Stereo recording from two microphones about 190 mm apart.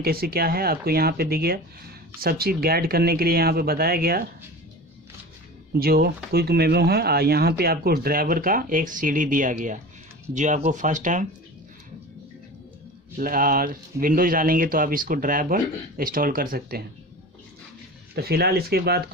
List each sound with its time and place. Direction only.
0.0 s speech: 55° right (ahead or behind)
5.8 s speech: 55° right (ahead or behind)
13.2 s speech: 50° right (ahead or behind)
18.1 s speech: 55° right (ahead or behind)